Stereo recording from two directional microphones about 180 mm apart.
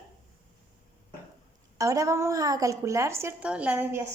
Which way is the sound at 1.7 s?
20° right (ahead or behind).